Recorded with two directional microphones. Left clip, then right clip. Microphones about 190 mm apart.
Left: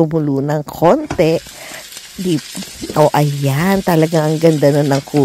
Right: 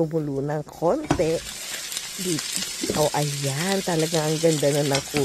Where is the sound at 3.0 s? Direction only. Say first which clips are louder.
Left 12 dB; 40° left (ahead or behind).